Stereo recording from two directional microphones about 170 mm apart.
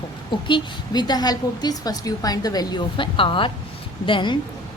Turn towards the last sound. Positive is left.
turn(degrees=30)  # may be behind; listen again after turning